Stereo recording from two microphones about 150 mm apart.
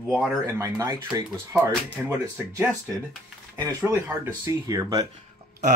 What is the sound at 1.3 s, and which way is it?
Speech, 5° left (ahead or behind).